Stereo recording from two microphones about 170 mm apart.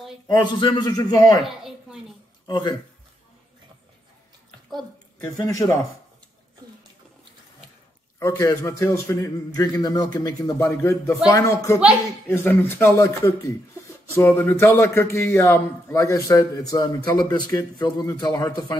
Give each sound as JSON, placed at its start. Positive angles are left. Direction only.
{"t": 0.3, "sound": "a man's voice", "side_deg": 25}
{"t": 1.4, "sound": "speech", "side_deg": 0}
{"t": 2.4, "sound": "speech", "side_deg": 25}
{"t": 5.2, "sound": "a man's voice", "side_deg": 20}
{"t": 8.2, "sound": "a man's voice", "side_deg": 20}